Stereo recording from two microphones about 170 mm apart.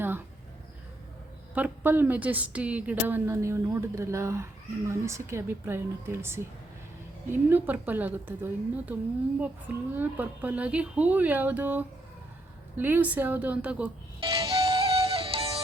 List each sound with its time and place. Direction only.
1.5 s a woman's voice: 10° right (ahead or behind)
14.2 s music: 30° right (ahead or behind)